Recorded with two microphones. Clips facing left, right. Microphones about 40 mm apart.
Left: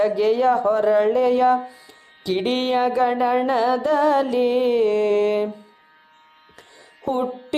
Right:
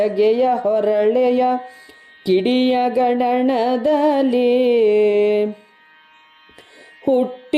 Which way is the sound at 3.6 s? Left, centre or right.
Right.